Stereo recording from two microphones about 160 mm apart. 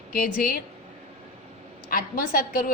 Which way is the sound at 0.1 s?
65° left (ahead or behind).